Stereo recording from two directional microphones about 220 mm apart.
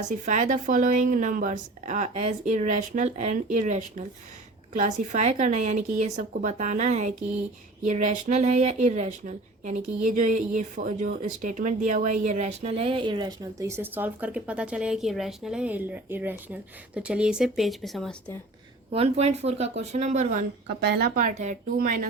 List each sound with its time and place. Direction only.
0.1 s a woman's voice: 30° right (ahead or behind); by 18.1 s centre (ahead or behind)
18.9 s a woman's voice: 30° right (ahead or behind)